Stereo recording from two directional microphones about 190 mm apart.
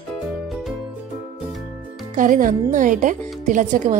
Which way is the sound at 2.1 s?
45° right (ahead or behind).